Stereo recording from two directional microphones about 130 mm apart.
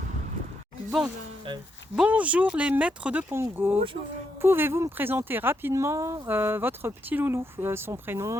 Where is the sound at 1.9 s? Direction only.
10° right (ahead or behind).